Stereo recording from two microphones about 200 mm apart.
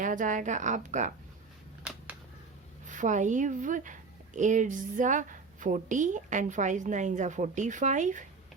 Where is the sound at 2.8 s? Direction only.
40° right (ahead or behind).